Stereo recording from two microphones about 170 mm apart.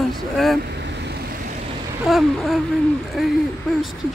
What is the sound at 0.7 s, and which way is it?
Vehicle, 80° right.